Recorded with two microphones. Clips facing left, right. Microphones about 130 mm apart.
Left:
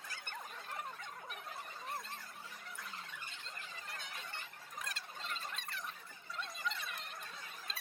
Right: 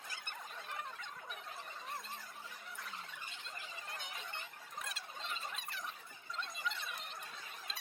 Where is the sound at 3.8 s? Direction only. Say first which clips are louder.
Right 1 dB; 20° right (ahead or behind).